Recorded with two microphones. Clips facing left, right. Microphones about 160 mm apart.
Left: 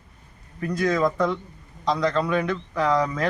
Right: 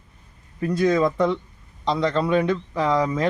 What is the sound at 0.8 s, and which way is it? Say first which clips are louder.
A man's voice: right 2 dB; 25° right (ahead or behind).